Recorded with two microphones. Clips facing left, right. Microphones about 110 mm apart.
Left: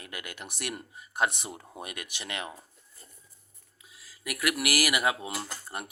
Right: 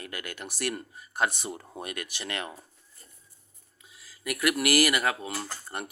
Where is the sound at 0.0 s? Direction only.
15° left (ahead or behind).